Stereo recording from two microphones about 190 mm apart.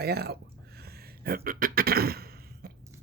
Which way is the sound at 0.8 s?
55° right (ahead or behind).